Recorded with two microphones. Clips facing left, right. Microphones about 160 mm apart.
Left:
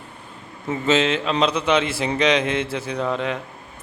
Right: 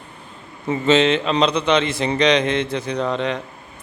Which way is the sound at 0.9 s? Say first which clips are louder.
Right 3 dB; 5° left (ahead or behind).